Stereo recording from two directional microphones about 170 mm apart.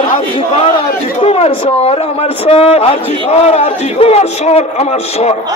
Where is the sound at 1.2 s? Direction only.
35° left (ahead or behind).